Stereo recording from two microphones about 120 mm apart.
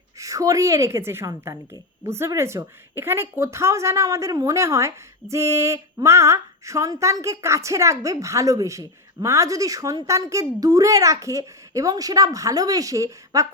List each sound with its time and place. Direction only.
0.2 s speech: 25° right (ahead or behind)